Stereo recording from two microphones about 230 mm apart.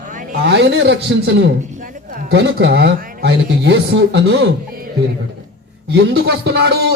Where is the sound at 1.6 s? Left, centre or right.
Right.